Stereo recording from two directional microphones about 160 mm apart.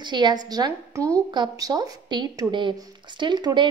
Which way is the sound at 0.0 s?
30° right (ahead or behind).